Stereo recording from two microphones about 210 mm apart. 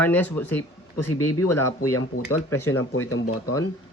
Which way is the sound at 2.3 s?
90° left.